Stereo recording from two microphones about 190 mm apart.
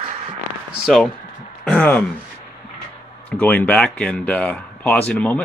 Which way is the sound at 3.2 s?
10° left (ahead or behind).